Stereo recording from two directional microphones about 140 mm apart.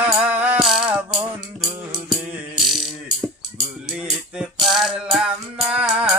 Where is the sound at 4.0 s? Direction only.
5° right (ahead or behind).